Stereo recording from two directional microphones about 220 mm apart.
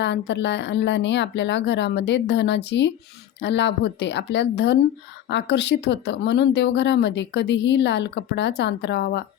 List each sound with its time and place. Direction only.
0.0 s speech: 50° left (ahead or behind)